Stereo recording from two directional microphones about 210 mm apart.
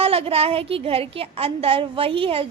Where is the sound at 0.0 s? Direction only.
25° right (ahead or behind).